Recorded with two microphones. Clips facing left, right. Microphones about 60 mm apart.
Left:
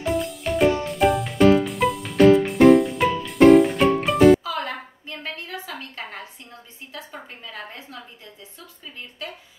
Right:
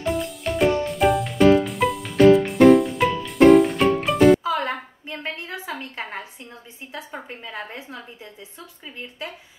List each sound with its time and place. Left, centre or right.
0.0 s music: centre
4.6 s a sound: right
6.9 s a woman's voice: right